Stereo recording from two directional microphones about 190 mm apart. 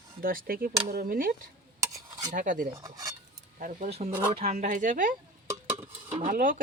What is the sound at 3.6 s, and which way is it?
Speech, 45° right (ahead or behind).